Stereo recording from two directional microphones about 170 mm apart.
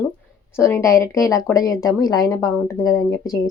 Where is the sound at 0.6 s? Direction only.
15° left (ahead or behind).